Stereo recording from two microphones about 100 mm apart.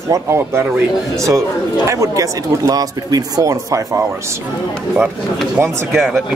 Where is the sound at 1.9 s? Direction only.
35° right (ahead or behind).